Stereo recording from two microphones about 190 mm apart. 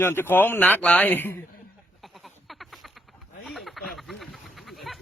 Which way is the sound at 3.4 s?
Centre (ahead or behind).